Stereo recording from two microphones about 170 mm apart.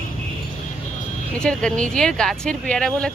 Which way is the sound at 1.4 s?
5° left (ahead or behind).